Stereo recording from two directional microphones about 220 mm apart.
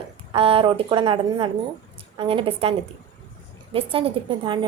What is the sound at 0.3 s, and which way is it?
A woman's voice, 25° right (ahead or behind).